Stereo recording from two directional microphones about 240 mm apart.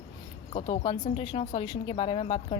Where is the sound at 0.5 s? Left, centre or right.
Left.